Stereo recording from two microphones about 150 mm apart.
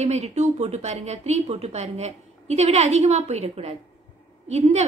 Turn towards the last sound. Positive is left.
turn(degrees=-45)  # may be behind; listen again after turning